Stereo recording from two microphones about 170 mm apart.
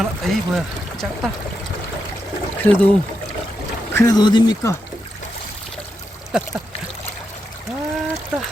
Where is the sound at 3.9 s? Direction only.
20° left (ahead or behind).